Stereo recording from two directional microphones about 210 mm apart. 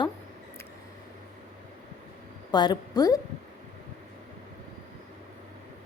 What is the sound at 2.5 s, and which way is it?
Speech, 20° left (ahead or behind).